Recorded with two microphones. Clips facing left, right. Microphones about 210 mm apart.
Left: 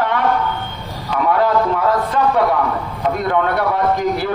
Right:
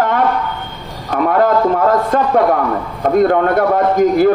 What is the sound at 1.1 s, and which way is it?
A man's voice, 45° right (ahead or behind).